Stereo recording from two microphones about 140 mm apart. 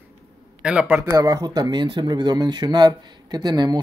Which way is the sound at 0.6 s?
10° right (ahead or behind).